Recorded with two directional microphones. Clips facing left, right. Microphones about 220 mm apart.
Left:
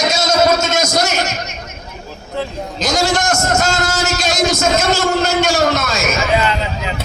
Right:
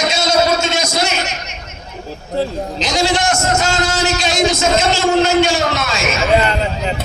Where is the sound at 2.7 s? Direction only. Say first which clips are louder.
Left 1 dB; 45° left (ahead or behind).